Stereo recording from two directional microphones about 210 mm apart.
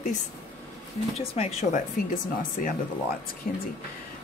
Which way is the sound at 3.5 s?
40° left (ahead or behind).